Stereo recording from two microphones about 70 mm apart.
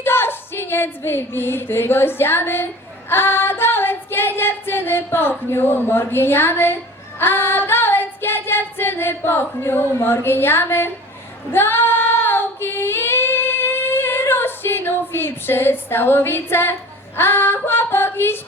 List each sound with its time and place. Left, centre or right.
0.0 s a sound: left
3.1 s female singing: left
11.5 s child singing: left
17.2 s female singing: left